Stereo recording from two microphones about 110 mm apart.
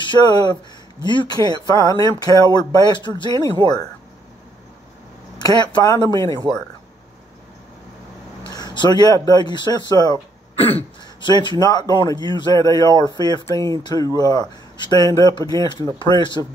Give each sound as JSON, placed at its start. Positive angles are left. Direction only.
{"t": 0.0, "sound": "speech", "side_deg": 40}
{"t": 1.5, "sound": "speech", "side_deg": 30}
{"t": 5.6, "sound": "speech", "side_deg": 40}
{"t": 6.2, "sound": "speech", "side_deg": -40}
{"t": 8.5, "sound": "speech", "side_deg": 40}
{"t": 10.5, "sound": "throat clearing", "side_deg": 65}
{"t": 11.2, "sound": "speech", "side_deg": 40}